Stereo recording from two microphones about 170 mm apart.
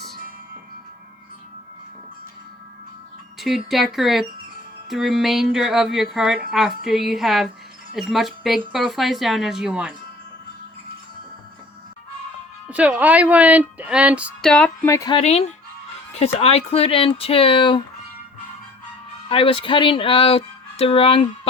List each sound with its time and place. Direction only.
3.3 s speech: centre (ahead or behind)
12.6 s speech: 10° right (ahead or behind)
14.4 s music: 5° left (ahead or behind)
14.8 s music: 20° left (ahead or behind)
15.1 s speech: 35° left (ahead or behind)
19.3 s speech: 30° left (ahead or behind)